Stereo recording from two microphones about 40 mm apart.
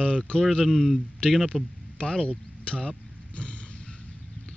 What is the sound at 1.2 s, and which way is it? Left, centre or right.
Speech, left.